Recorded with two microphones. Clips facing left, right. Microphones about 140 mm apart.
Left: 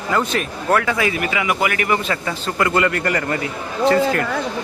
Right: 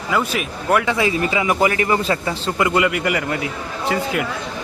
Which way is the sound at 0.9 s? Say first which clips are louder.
Right 1 dB; 25° right (ahead or behind).